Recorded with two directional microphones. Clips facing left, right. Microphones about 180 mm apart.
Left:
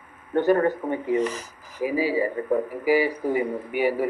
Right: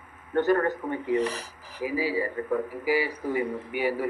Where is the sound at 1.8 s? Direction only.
15° left (ahead or behind).